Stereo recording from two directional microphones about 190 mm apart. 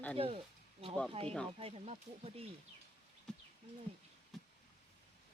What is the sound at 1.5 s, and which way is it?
Speech, 30° right (ahead or behind).